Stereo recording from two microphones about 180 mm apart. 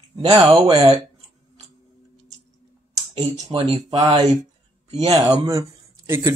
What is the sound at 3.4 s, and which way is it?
Speech, 35° right (ahead or behind).